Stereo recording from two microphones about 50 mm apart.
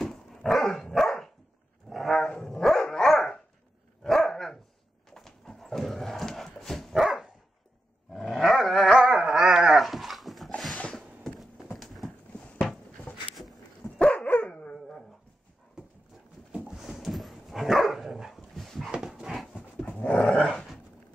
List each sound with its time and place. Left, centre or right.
0.0 s dog: centre
1.9 s a sound: centre
2.4 s dog: centre
6.9 s dog: centre
8.9 s dog: centre
9.8 s dog: centre
11.7 s horse: centre
13.1 s a sound: left
13.9 s dog: left
16.7 s dog: centre
19.0 s dog: centre
19.8 s dog: left